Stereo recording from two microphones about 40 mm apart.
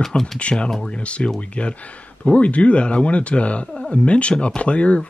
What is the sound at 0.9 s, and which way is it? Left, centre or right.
Speech, left.